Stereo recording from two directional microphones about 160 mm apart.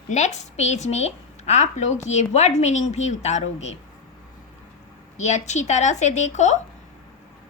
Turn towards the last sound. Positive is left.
turn(degrees=45)  # may be behind; listen again after turning